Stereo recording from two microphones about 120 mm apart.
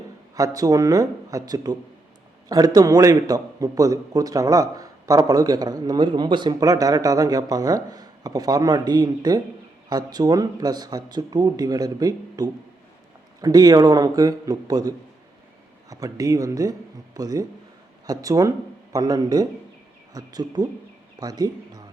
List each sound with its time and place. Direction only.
0.3 s a man's voice: 30° right (ahead or behind)